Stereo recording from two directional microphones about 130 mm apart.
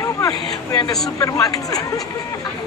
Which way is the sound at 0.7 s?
30° left (ahead or behind).